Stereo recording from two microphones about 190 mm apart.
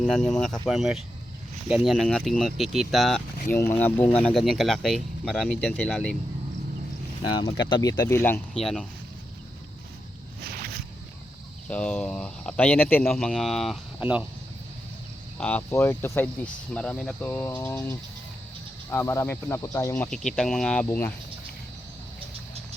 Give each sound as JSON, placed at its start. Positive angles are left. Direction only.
{"t": 0.0, "sound": "speech", "side_deg": 5}
{"t": 7.3, "sound": "speech", "side_deg": 20}
{"t": 10.4, "sound": "boat", "side_deg": -55}
{"t": 11.7, "sound": "speech", "side_deg": 5}
{"t": 15.4, "sound": "speech", "side_deg": 5}
{"t": 20.1, "sound": "speech", "side_deg": 0}